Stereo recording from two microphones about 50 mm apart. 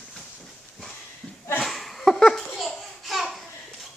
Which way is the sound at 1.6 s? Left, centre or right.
Centre.